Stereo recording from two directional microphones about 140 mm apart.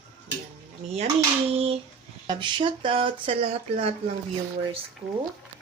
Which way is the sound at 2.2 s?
35° right (ahead or behind).